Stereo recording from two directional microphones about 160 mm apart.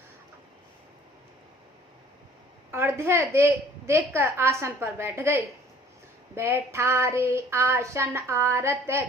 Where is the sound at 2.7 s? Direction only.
15° right (ahead or behind).